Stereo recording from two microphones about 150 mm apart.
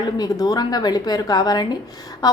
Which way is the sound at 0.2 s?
25° left (ahead or behind).